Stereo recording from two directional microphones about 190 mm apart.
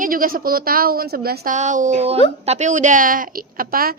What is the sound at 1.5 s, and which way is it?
A child's voice, 40° right (ahead or behind).